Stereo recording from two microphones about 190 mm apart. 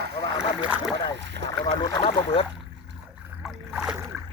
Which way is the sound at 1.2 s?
70° right (ahead or behind).